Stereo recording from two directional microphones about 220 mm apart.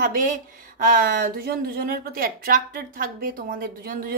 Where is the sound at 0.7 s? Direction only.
40° right (ahead or behind).